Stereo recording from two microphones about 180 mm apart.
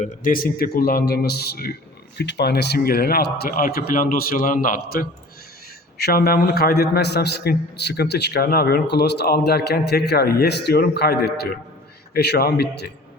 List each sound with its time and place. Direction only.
0.0 s a man's voice: 45° left (ahead or behind); by 12.9 s 60° left (ahead or behind)